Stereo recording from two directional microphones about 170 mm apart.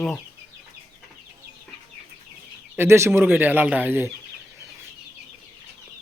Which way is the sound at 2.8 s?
15° right (ahead or behind).